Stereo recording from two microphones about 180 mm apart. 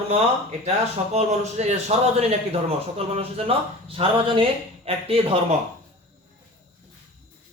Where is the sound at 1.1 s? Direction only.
40° right (ahead or behind).